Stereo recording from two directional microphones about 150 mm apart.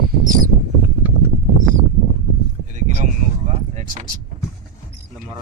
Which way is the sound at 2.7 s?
55° right (ahead or behind).